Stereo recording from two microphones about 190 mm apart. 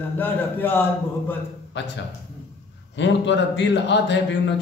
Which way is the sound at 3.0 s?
70° left (ahead or behind).